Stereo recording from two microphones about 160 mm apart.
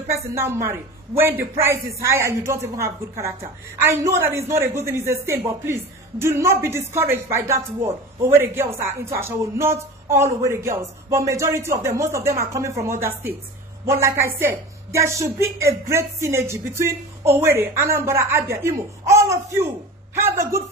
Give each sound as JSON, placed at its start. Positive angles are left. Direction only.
{"t": 0.1, "sound": "a man's voice", "side_deg": -15}